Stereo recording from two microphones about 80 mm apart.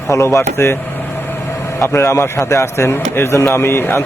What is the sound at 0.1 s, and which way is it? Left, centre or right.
Speech, left.